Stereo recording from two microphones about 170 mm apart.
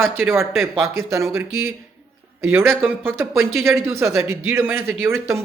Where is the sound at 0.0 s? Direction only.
15° right (ahead or behind).